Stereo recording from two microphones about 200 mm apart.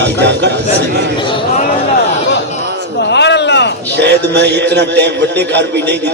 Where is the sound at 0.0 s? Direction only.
60° right (ahead or behind).